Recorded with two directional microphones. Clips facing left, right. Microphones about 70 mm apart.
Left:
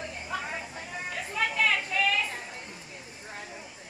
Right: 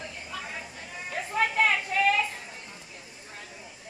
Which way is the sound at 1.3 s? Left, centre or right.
Right.